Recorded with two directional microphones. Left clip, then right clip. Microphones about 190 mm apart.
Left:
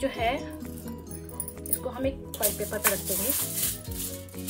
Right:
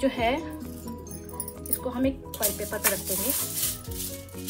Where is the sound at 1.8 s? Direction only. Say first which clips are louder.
Right 2 dB; 40° right (ahead or behind).